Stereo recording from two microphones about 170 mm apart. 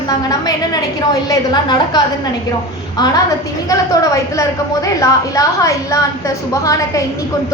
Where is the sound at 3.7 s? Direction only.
20° left (ahead or behind).